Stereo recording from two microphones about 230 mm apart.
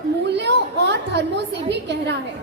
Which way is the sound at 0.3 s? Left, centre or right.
Right.